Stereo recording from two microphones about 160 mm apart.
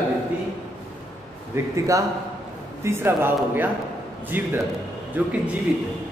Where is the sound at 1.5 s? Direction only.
15° right (ahead or behind).